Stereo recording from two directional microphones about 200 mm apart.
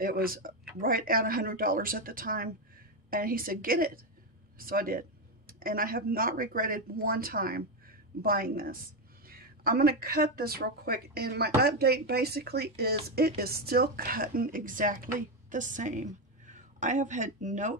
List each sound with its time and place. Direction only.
0.0 s a woman's voice: 45° right (ahead or behind)